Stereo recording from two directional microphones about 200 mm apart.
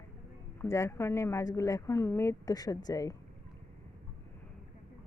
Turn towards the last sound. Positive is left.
turn(degrees=20)  # may be behind; listen again after turning